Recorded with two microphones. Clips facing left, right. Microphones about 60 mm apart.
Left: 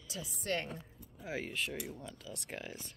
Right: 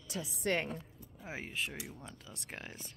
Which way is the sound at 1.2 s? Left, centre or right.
Right.